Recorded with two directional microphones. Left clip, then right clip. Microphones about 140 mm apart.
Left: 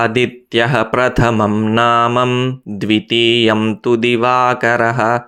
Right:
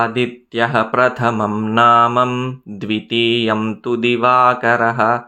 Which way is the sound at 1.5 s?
30° left (ahead or behind).